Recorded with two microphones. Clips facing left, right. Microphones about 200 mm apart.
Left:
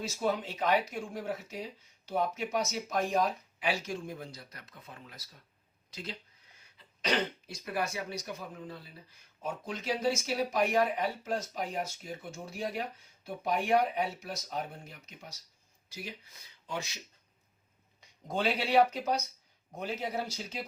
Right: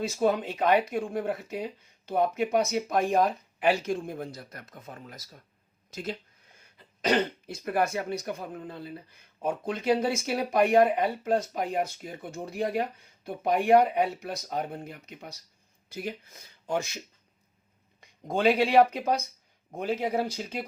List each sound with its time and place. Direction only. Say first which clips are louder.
0.0 s speech: right 6 dB; 55° right (ahead or behind)
18.0 s speech: right 7 dB; 55° right (ahead or behind)